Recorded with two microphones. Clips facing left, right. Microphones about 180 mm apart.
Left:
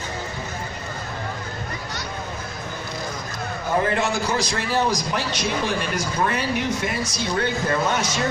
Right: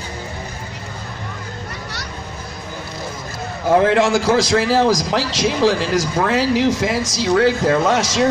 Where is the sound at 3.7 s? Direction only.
90° right.